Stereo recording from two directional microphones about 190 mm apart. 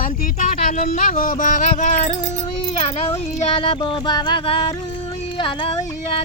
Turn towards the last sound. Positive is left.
turn(degrees=25)  # may be behind; listen again after turning